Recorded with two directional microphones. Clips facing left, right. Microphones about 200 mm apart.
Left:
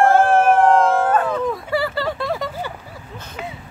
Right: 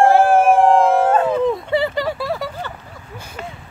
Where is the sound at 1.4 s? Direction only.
25° right (ahead or behind); by 2.5 s 5° right (ahead or behind).